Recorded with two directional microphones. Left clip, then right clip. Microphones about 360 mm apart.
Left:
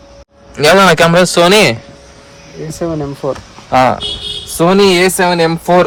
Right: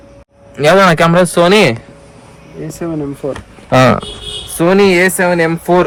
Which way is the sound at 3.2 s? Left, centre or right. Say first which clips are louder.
Left 4 dB; left.